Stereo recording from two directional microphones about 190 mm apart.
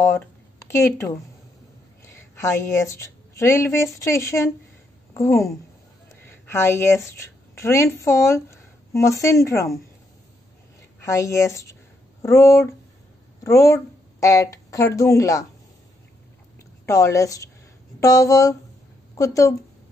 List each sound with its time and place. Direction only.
0.7 s a woman's voice: 15° left (ahead or behind)
11.0 s a woman's voice: 15° left (ahead or behind)
16.8 s a woman's voice: 15° left (ahead or behind)